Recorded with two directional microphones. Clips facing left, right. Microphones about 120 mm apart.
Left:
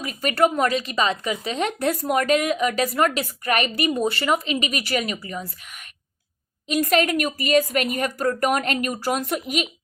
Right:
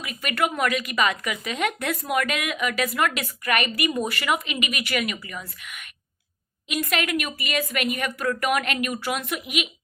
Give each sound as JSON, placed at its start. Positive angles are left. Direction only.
{"t": 0.0, "sound": "speech", "side_deg": 35}